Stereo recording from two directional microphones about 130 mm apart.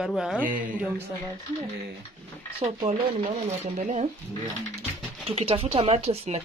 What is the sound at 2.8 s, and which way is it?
Speech, 50° right (ahead or behind).